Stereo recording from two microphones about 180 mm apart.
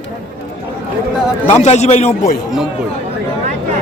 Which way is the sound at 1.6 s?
40° left (ahead or behind).